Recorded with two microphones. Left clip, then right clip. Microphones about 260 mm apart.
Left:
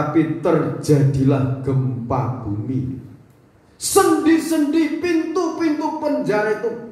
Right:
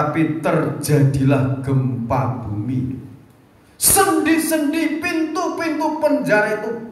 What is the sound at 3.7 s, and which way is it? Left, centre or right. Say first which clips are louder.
Speech: even; right.